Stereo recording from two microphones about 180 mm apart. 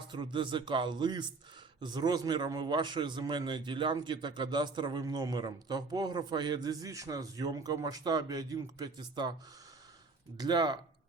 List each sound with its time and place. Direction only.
0.1 s a man's voice: 25° right (ahead or behind)
10.3 s a man's voice: 20° right (ahead or behind)